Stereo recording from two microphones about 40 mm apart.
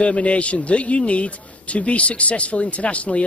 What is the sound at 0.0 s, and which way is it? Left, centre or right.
Speech, left.